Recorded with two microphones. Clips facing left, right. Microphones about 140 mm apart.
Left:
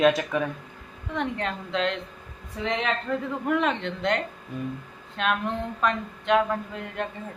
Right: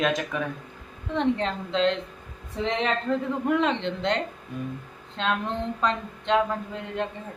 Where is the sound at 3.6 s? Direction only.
20° right (ahead or behind).